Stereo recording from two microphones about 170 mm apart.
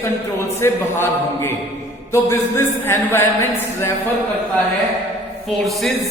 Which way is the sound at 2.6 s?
15° left (ahead or behind).